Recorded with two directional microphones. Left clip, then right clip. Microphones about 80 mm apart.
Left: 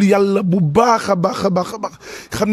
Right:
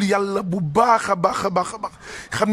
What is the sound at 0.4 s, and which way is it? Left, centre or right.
Speech, left.